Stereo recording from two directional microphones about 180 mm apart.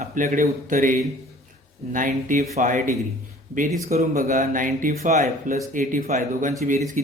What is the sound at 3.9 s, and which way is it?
A man's voice, 50° right (ahead or behind).